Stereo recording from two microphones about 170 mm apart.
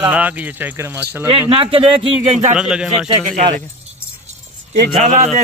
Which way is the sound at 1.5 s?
30° right (ahead or behind).